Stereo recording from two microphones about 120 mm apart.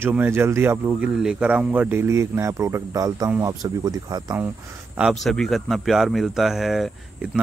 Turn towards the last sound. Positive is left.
turn(degrees=-5)  # may be behind; listen again after turning